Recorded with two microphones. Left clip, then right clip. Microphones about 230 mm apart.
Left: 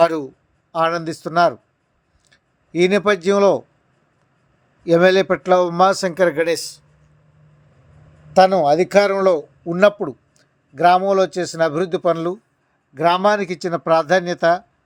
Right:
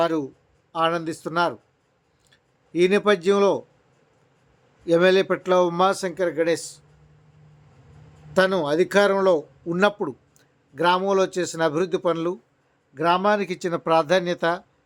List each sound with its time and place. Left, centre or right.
0.0 s speech: left
4.9 s speech: centre
6.1 s speech: left
8.3 s speech: centre